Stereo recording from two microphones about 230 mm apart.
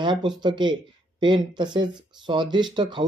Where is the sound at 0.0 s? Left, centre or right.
Centre.